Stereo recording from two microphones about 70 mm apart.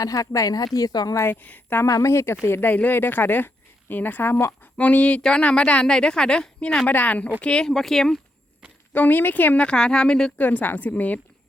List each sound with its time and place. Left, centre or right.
0.0 s a woman's voice: left
1.2 s speech: left
1.9 s speech: left
4.6 s a woman's voice: left
7.7 s speech: centre
8.9 s speech: left
9.6 s a woman's voice: centre
10.3 s speech: left